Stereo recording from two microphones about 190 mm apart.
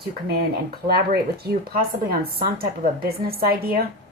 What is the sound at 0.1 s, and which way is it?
Speech, 55° right (ahead or behind).